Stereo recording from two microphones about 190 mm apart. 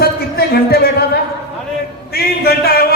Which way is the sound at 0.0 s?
55° left (ahead or behind).